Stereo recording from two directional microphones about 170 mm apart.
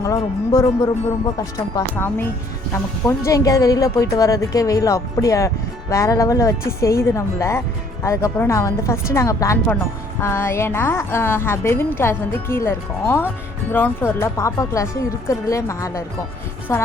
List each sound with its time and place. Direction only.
0.0 s a woman's voice: 20° left (ahead or behind)